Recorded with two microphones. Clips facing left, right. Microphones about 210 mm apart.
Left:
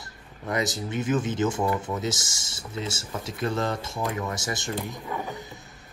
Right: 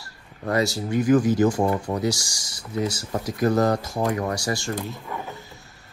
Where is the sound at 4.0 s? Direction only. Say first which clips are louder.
Right 3 dB; 45° right (ahead or behind).